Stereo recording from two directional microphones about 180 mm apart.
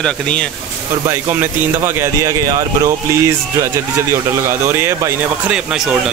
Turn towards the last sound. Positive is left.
turn(degrees=-10)  # may be behind; listen again after turning